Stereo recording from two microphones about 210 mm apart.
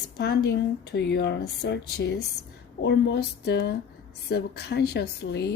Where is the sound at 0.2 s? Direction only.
55° left (ahead or behind).